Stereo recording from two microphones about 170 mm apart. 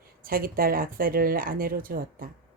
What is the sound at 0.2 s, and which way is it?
A woman's voice, 55° right (ahead or behind).